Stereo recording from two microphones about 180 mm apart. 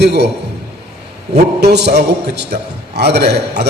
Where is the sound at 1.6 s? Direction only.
70° right (ahead or behind).